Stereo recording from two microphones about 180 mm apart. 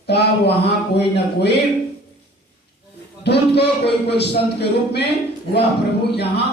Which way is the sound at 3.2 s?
65° left (ahead or behind).